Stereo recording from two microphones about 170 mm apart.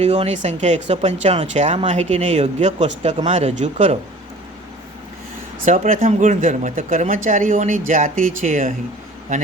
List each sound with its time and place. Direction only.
0.0 s speech: 40° right (ahead or behind)
5.6 s speech: 45° right (ahead or behind)